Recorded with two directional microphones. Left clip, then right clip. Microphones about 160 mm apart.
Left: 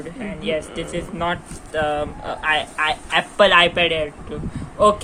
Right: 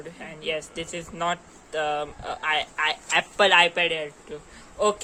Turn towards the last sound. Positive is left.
turn(degrees=-20)  # may be behind; listen again after turning